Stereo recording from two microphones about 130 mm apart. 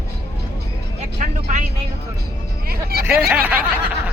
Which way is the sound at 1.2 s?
75° right (ahead or behind).